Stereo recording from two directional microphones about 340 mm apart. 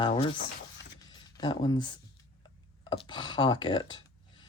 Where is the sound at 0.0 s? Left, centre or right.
Centre.